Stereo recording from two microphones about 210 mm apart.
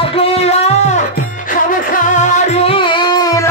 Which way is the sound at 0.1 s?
25° left (ahead or behind).